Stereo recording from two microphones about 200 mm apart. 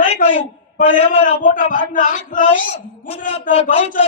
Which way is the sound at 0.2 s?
45° left (ahead or behind).